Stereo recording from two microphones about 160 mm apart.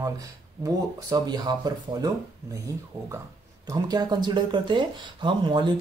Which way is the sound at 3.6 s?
25° right (ahead or behind).